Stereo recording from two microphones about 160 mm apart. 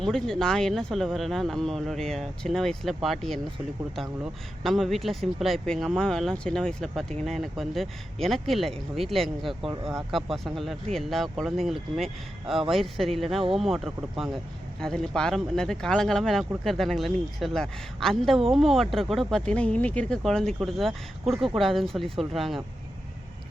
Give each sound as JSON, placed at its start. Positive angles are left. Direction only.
{"t": 0.0, "sound": "speech", "side_deg": 5}
{"t": 9.6, "sound": "speech", "side_deg": -35}
{"t": 10.1, "sound": "speech", "side_deg": 0}